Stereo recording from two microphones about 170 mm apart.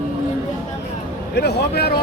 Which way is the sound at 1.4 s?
75° left (ahead or behind).